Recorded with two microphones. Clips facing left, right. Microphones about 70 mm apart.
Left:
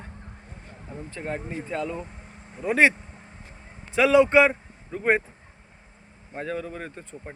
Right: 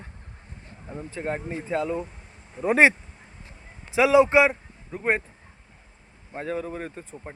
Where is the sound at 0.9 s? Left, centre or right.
Centre.